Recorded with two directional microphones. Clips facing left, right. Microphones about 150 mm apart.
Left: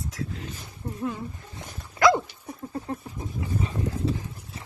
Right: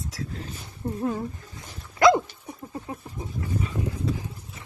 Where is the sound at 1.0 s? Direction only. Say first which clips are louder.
Right 3 dB; 40° right (ahead or behind).